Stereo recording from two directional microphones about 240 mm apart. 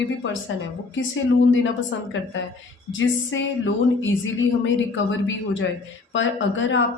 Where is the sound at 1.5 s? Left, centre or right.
Left.